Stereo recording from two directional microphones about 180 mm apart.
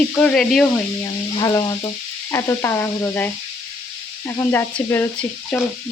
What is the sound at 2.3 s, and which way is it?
Speech, 15° left (ahead or behind).